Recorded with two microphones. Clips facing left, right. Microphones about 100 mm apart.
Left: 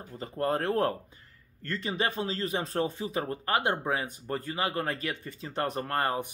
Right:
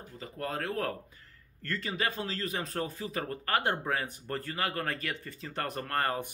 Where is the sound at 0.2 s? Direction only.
30° left (ahead or behind).